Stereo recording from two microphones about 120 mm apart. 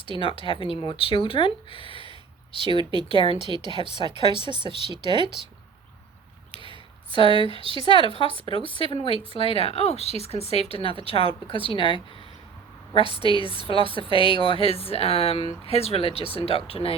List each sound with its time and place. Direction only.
0.0 s speech: 50° left (ahead or behind)
2.6 s speech: 40° right (ahead or behind)
3.1 s speech: 50° left (ahead or behind)
3.4 s speech: 40° right (ahead or behind)
6.7 s speech: 45° right (ahead or behind)
8.5 s speech: 45° left (ahead or behind)
13.2 s speech: 50° left (ahead or behind)